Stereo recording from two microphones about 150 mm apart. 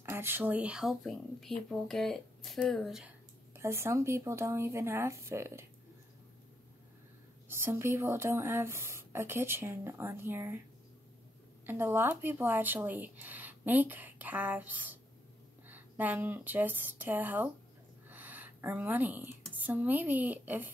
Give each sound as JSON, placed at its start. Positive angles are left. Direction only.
{"t": 0.0, "sound": "speech", "side_deg": -15}
{"t": 3.5, "sound": "speech", "side_deg": -15}
{"t": 7.4, "sound": "speech", "side_deg": -15}
{"t": 11.6, "sound": "speech", "side_deg": -15}
{"t": 18.0, "sound": "a sound", "side_deg": -10}
{"t": 19.6, "sound": "speech", "side_deg": -10}